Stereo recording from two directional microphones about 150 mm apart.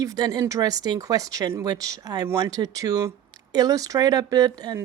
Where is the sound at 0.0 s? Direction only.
25° right (ahead or behind).